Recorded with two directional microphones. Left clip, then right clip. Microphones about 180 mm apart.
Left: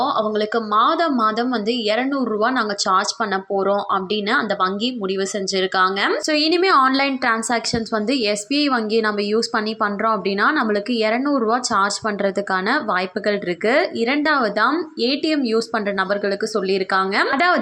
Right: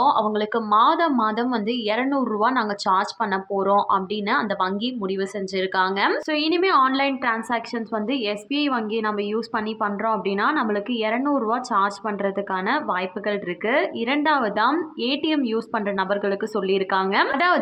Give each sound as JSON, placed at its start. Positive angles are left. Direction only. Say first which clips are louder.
{"t": 0.0, "sound": "a woman's voice", "louder": "even", "side_deg": 10}